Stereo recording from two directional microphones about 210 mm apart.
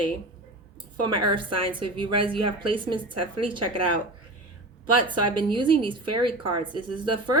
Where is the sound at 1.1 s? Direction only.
25° right (ahead or behind).